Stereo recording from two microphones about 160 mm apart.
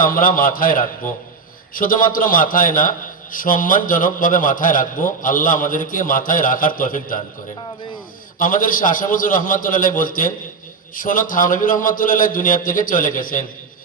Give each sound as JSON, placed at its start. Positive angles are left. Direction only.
{"t": 0.0, "sound": "a man's voice", "side_deg": 60}
{"t": 8.4, "sound": "a man's voice", "side_deg": 60}